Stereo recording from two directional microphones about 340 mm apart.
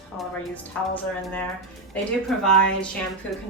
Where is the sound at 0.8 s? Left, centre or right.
Centre.